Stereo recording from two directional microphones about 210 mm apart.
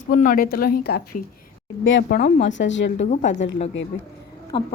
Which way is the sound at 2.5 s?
60° left (ahead or behind).